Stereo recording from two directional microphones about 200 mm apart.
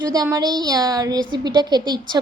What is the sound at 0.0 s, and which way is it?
A woman's voice, 20° right (ahead or behind).